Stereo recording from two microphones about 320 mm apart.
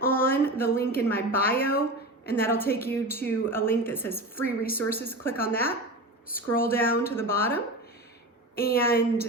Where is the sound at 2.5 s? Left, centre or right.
Centre.